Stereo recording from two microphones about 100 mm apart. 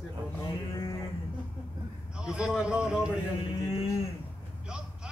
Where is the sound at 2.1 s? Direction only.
10° right (ahead or behind).